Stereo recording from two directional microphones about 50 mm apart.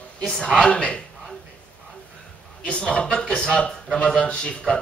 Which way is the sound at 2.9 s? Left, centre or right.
Centre.